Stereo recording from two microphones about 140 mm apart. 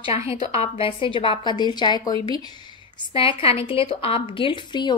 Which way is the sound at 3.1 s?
40° left (ahead or behind).